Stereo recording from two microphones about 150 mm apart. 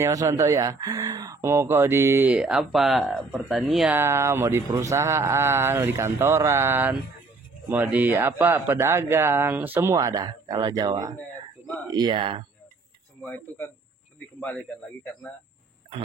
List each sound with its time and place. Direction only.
0.0 s speech: 20° right (ahead or behind); by 3.9 s centre (ahead or behind)
3.9 s speech: 15° right (ahead or behind); by 12.4 s 35° right (ahead or behind)
13.2 s speech: 10° left (ahead or behind)